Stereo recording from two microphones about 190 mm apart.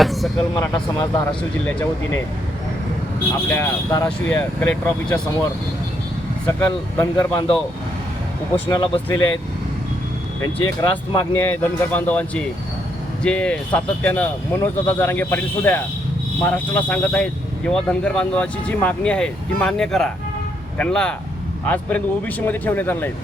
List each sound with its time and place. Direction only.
0.0 s speech: centre (ahead or behind)
0.6 s speech: 20° left (ahead or behind)
3.5 s a man's voice: 15° left (ahead or behind)
6.4 s a man's voice: 10° left (ahead or behind)
7.3 s speech: 30° left (ahead or behind)
8.7 s speech: 25° left (ahead or behind)
10.4 s speech: 20° left (ahead or behind)
11.3 s a man's voice: 10° left (ahead or behind)